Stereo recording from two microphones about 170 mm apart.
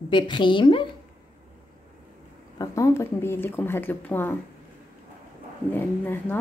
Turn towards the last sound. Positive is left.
turn(degrees=10)  # may be behind; listen again after turning